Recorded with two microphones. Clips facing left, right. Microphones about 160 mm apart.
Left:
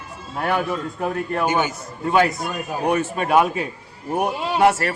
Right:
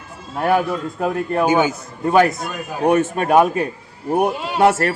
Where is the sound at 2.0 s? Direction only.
45° right (ahead or behind).